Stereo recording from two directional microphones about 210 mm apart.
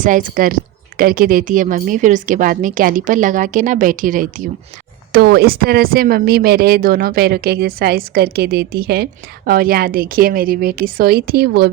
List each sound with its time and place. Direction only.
0.0 s a woman's voice: 40° right (ahead or behind)